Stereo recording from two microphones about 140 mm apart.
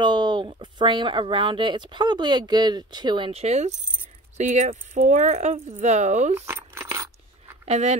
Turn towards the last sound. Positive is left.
turn(degrees=-50)  # may be behind; listen again after turning